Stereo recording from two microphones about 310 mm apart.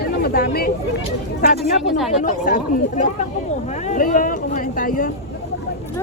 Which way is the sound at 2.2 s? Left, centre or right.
Left.